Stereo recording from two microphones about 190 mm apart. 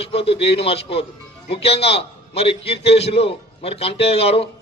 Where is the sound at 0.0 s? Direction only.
30° left (ahead or behind).